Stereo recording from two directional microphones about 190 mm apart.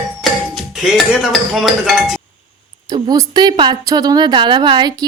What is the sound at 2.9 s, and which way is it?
A woman's voice, 20° right (ahead or behind).